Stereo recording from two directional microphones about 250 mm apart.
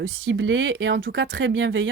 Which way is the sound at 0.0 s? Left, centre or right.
Right.